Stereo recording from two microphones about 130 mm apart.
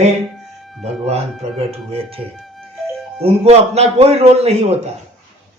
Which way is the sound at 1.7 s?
45° right (ahead or behind).